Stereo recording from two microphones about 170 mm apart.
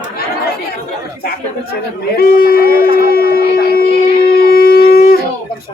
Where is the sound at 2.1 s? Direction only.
60° left (ahead or behind).